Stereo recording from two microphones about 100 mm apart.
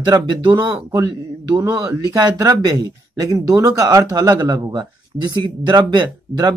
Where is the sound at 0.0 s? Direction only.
45° right (ahead or behind).